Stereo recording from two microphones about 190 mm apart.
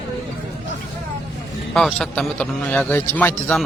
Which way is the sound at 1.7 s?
Centre (ahead or behind).